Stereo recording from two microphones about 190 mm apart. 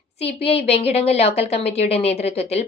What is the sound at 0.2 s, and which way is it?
A woman's voice, 30° left (ahead or behind).